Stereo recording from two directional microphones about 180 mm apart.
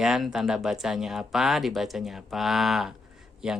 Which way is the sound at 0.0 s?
Centre (ahead or behind).